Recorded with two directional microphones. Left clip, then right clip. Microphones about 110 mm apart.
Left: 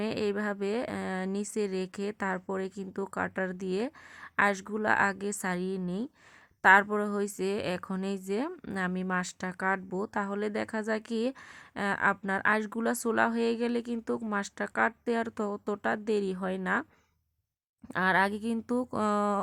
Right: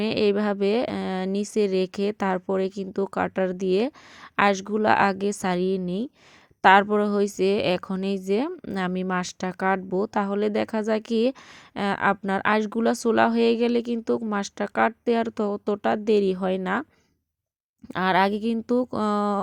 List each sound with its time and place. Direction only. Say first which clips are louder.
0.0 s speech: right 9 dB; 45° right (ahead or behind)
17.9 s speech: right 5 dB; 40° right (ahead or behind)